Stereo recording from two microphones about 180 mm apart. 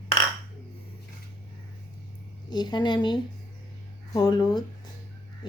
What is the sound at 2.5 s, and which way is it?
A woman's voice, 25° left (ahead or behind).